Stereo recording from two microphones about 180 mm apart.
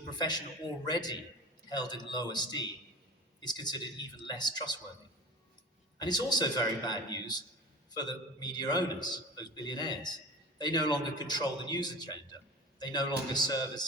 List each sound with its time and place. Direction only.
0.9 s a man's voice: 25° left (ahead or behind)
6.0 s a man's voice: 25° left (ahead or behind)